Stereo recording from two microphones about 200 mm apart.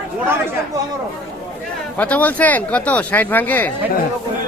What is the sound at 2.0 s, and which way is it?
Speech, 5° left (ahead or behind).